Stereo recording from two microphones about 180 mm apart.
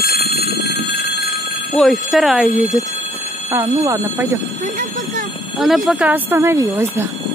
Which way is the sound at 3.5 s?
15° right (ahead or behind).